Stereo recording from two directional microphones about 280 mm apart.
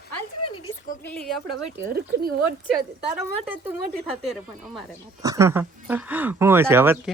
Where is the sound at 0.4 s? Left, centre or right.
Left.